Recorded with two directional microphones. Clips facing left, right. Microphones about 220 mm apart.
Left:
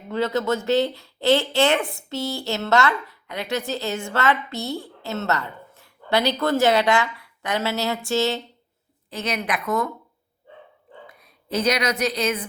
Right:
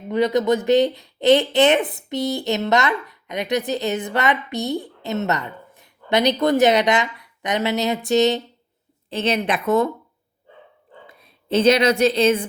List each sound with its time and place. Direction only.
0.1 s a woman's voice: 15° right (ahead or behind)
11.0 s a woman's voice: 25° right (ahead or behind)